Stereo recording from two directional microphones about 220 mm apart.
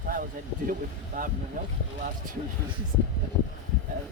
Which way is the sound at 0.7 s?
40° right (ahead or behind).